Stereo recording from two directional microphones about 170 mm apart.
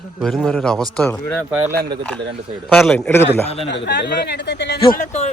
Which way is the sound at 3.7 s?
85° left.